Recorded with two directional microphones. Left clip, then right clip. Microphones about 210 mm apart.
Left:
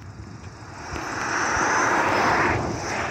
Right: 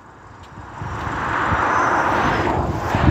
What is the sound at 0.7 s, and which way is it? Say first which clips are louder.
Vehicle: right 4 dB; 45° left (ahead or behind).